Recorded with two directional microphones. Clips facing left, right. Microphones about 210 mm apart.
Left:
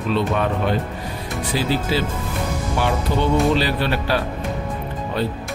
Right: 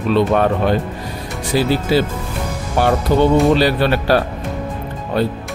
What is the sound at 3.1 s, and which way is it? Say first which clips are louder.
Speech: right 10 dB; 50° right (ahead or behind).